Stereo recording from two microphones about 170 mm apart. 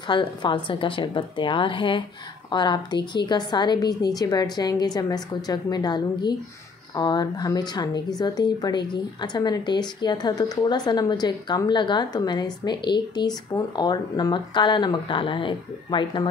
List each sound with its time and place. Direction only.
0.1 s a woman's voice: 30° left (ahead or behind)